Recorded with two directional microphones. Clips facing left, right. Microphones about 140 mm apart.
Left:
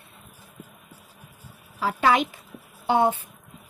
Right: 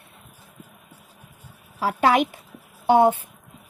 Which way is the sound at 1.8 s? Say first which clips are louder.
Right 2 dB; 55° right (ahead or behind).